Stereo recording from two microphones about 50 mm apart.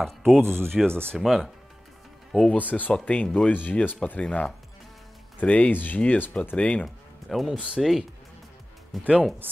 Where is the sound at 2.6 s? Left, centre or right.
Left.